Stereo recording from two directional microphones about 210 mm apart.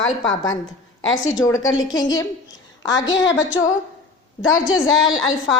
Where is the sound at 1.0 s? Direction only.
70° left (ahead or behind).